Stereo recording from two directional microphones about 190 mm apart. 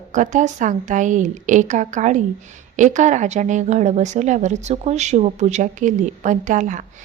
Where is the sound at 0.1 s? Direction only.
40° right (ahead or behind).